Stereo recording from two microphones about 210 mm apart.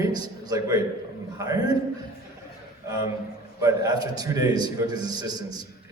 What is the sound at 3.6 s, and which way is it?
A man's voice, 20° right (ahead or behind).